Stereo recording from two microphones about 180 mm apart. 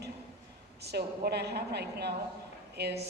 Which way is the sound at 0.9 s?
65° right (ahead or behind).